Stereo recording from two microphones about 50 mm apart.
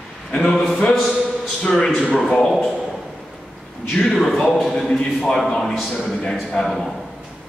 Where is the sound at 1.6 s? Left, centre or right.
Centre.